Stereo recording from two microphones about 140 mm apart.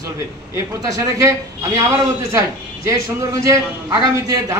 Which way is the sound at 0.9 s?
20° right (ahead or behind).